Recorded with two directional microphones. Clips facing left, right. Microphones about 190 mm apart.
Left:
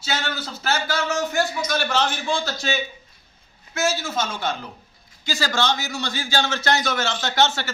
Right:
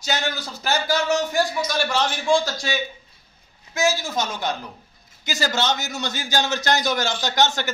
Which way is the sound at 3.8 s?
15° right (ahead or behind).